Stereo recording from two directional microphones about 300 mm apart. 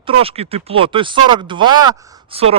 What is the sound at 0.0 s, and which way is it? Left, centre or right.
Speech, centre.